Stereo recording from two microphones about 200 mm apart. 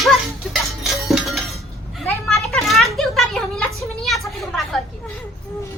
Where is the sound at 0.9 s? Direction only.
Centre (ahead or behind).